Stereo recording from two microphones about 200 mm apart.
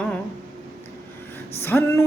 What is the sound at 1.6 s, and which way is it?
Speech, 10° left (ahead or behind).